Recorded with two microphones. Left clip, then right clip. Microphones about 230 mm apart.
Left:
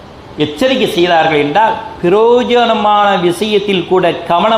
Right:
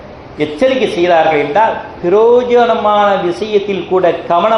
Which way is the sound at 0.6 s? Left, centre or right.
Left.